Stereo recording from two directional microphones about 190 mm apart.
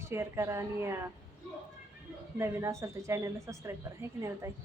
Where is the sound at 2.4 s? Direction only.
15° right (ahead or behind).